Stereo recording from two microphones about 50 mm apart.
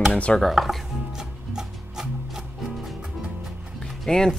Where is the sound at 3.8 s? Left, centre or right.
Centre.